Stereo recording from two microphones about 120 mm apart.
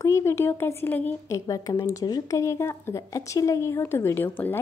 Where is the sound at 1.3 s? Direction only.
30° left (ahead or behind).